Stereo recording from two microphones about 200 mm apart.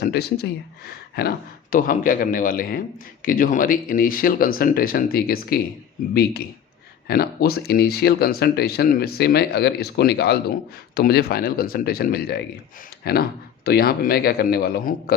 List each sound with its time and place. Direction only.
0.0 s speech: 50° left (ahead or behind)
7.1 s speech: 50° left (ahead or behind)